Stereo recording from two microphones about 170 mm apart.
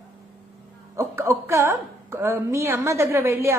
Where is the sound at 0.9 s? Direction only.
15° right (ahead or behind).